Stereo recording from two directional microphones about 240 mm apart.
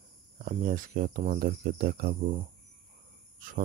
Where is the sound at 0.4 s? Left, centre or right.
Right.